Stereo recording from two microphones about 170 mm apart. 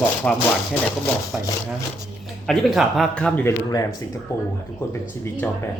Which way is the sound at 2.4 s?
Centre (ahead or behind).